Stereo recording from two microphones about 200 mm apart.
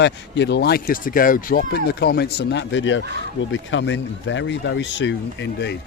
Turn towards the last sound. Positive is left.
turn(degrees=60)  # may be behind; listen again after turning